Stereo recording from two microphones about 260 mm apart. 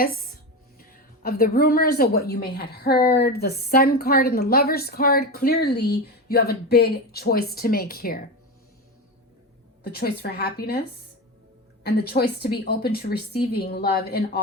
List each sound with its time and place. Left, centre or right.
0.8 s a woman's voice: left
9.8 s a woman's voice: left